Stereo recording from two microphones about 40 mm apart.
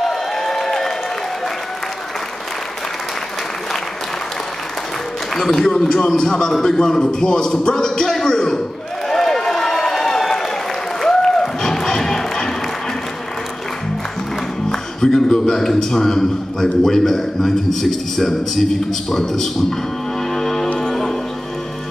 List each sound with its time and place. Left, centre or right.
0.0 s a sound: centre
5.3 s a man's voice: centre
9.1 s run: centre
11.0 s music: centre
14.7 s a man's voice: centre
20.3 s music: centre